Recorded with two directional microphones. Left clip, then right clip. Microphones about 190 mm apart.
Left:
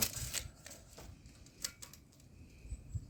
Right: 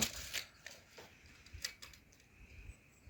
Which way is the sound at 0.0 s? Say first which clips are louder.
Even; 10° right (ahead or behind).